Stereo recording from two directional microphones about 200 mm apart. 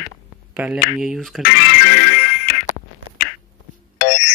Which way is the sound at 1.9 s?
50° left (ahead or behind).